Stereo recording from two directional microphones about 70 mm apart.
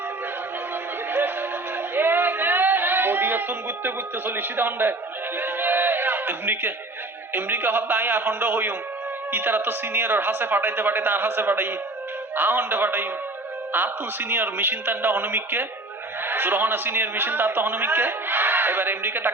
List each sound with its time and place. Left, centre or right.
1.1 s music: right
2.0 s a sound: right
3.8 s a man's voice: right
5.4 s music: right
7.3 s a man's voice: right